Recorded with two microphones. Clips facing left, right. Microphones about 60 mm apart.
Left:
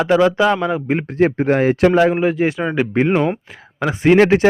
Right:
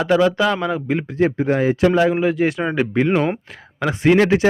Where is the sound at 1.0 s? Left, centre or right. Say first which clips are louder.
Left 3 dB; left.